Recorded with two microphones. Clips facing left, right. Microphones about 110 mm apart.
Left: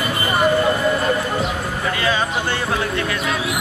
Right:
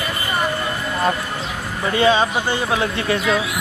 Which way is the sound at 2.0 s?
25° right (ahead or behind).